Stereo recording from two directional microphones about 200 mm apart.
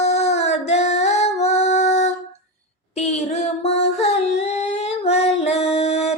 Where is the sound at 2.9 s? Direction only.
35° left (ahead or behind).